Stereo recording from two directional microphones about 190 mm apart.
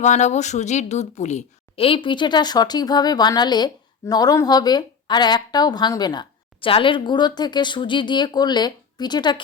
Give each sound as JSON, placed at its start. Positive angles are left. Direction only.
{"t": 0.0, "sound": "a woman's voice", "side_deg": 40}